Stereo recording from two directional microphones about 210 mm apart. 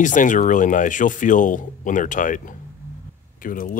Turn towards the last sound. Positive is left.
turn(degrees=40)  # may be behind; listen again after turning